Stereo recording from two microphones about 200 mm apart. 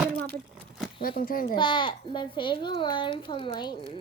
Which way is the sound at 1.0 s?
45° left (ahead or behind).